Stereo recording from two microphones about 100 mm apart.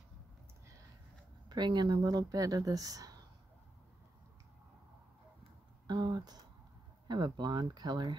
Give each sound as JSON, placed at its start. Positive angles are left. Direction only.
{"t": 1.5, "sound": "speech", "side_deg": -45}
{"t": 5.9, "sound": "speech", "side_deg": -45}